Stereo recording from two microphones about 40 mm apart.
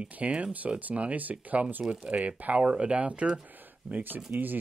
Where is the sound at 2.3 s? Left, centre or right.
Right.